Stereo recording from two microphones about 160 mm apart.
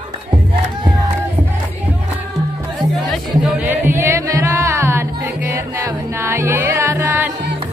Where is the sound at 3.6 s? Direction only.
15° right (ahead or behind).